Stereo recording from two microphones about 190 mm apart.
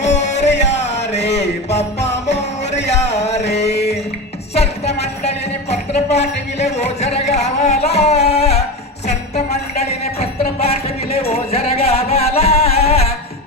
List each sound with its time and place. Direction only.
0.3 s music: 65° left (ahead or behind)
2.8 s a sound: 35° left (ahead or behind)
4.5 s music: 35° left (ahead or behind)
5.7 s speech: 35° left (ahead or behind)
9.0 s music: 35° left (ahead or behind)